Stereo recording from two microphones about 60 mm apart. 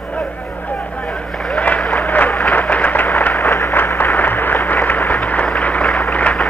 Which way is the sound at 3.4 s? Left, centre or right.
Left.